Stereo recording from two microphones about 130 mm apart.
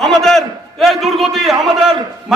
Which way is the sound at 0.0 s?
5° left (ahead or behind).